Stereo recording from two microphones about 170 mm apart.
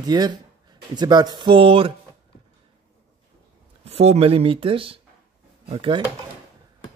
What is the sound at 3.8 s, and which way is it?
Speech, 40° right (ahead or behind).